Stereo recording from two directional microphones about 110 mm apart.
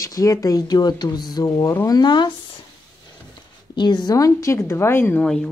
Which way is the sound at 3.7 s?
40° left (ahead or behind).